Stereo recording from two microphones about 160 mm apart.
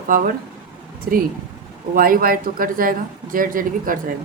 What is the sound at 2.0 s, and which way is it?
Speech, 60° right (ahead or behind).